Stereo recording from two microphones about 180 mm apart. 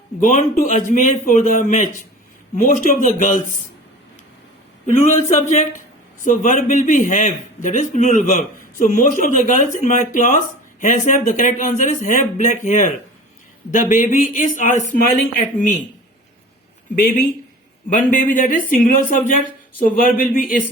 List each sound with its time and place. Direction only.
0.2 s speech: 45° left (ahead or behind)
5.0 s speech: 40° left (ahead or behind)
16.9 s speech: 50° left (ahead or behind)